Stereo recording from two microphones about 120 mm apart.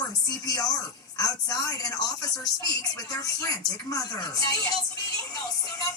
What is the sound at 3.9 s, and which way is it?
Speech, 30° left (ahead or behind).